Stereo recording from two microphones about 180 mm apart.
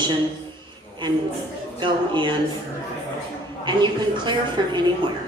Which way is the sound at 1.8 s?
25° right (ahead or behind).